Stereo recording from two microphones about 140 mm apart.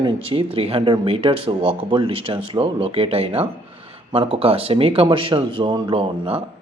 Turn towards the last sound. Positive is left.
turn(degrees=-40)  # may be behind; listen again after turning